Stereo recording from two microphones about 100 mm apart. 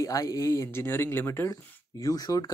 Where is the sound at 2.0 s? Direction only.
35° left (ahead or behind).